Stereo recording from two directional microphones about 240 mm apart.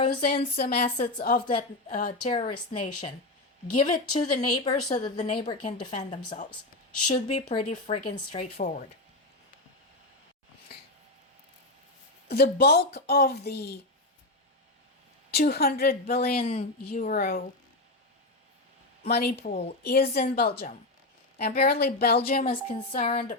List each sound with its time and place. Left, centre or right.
0.0 s speech: left
0.5 s a woman's voice: left; by 6.1 s centre
6.1 s a woman's voice: left
12.3 s a woman's voice: left
15.3 s a woman's voice: left
19.0 s a woman's voice: left
22.4 s a woman's voice: left